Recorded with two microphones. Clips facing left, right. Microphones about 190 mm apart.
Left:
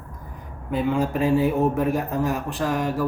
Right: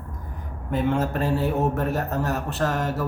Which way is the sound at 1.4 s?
Centre (ahead or behind).